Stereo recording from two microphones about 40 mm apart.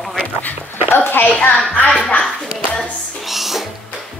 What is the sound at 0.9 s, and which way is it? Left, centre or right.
Speech, left.